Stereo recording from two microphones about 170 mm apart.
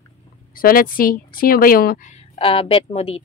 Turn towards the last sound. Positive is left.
turn(degrees=35)  # may be behind; listen again after turning